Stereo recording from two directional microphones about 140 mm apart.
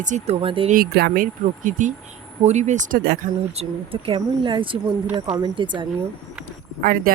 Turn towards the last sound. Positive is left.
turn(degrees=-85)